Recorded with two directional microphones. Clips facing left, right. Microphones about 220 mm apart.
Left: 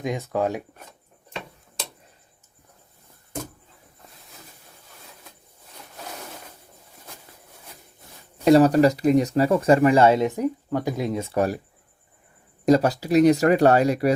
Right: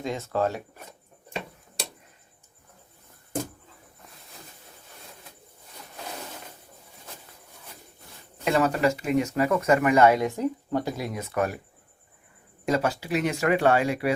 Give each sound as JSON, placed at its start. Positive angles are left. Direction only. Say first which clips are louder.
{"t": 0.0, "sound": "speech", "louder": "left 2 dB", "side_deg": 15}
{"t": 8.4, "sound": "speech", "louder": "left 8 dB", "side_deg": 35}
{"t": 12.6, "sound": "speech", "louder": "left 7 dB", "side_deg": 35}